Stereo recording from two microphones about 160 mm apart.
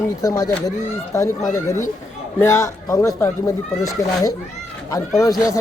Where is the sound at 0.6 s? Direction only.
20° left (ahead or behind).